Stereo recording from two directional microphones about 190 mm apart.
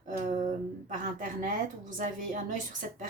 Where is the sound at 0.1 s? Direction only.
40° right (ahead or behind).